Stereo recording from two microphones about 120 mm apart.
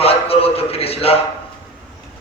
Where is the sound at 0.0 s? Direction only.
55° left (ahead or behind).